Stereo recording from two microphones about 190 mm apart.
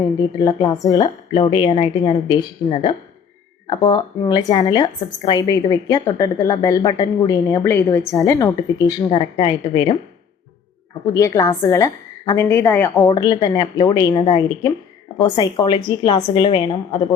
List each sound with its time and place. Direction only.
0.0 s a woman's voice: 20° left (ahead or behind)
11.0 s a woman's voice: 15° left (ahead or behind)
13.1 s a woman's voice: 20° left (ahead or behind)